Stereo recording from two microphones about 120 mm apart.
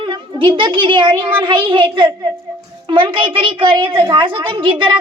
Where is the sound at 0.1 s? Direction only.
40° right (ahead or behind).